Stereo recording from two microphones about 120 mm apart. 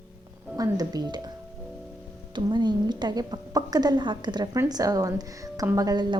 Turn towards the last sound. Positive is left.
turn(degrees=-35)  # may be behind; listen again after turning